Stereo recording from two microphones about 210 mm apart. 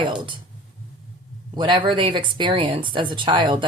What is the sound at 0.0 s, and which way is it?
Speech, 20° right (ahead or behind).